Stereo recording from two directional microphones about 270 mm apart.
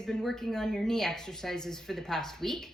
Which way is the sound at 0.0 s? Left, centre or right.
Centre.